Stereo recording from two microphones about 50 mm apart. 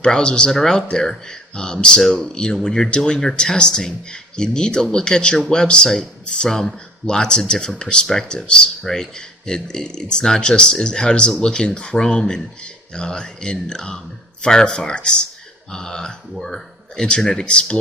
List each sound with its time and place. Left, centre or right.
0.0 s speech: centre
2.0 s speech: centre; by 6.5 s left
6.5 s speech: centre
8.0 s speech: centre
8.4 s speech: centre